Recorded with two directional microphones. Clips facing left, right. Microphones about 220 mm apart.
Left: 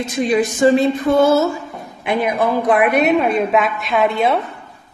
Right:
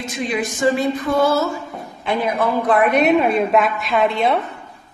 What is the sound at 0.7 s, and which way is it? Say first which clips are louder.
Music: left 4 dB; 25° left (ahead or behind).